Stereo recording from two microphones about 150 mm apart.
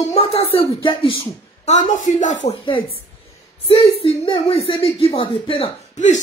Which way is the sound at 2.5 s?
35° left (ahead or behind).